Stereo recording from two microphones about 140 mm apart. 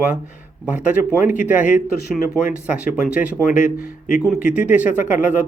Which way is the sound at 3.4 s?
85° left.